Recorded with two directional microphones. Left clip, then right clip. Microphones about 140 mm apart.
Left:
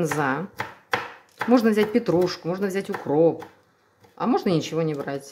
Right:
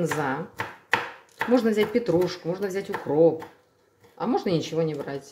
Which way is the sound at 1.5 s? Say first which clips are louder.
Left 2 dB; 30° left (ahead or behind).